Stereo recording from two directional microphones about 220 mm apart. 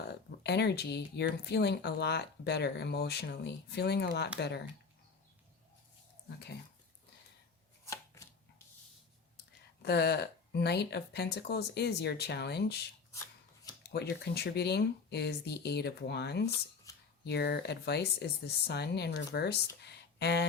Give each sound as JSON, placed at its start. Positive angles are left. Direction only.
{"t": 0.1, "sound": "speech", "side_deg": 50}
{"t": 9.8, "sound": "speech", "side_deg": 50}
{"t": 13.9, "sound": "speech", "side_deg": 45}
{"t": 16.9, "sound": "a sound", "side_deg": 15}
{"t": 17.2, "sound": "speech", "side_deg": 50}
{"t": 19.8, "sound": "a sound", "side_deg": 50}